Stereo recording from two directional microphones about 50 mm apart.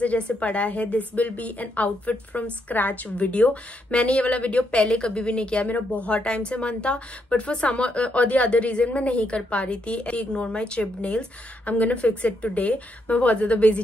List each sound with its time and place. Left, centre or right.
0.0 s speech: left
5.7 s speech: left